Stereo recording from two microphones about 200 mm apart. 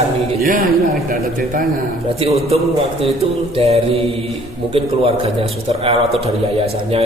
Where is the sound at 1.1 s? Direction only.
45° right (ahead or behind).